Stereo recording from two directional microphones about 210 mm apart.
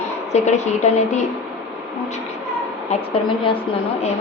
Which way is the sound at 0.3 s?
35° left (ahead or behind).